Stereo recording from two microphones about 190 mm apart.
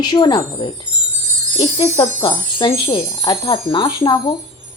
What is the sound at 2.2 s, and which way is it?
A woman's voice, 25° left (ahead or behind).